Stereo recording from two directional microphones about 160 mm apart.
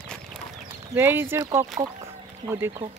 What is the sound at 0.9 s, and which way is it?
Speech, 15° right (ahead or behind).